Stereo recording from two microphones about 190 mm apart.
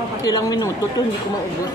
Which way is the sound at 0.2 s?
20° left (ahead or behind).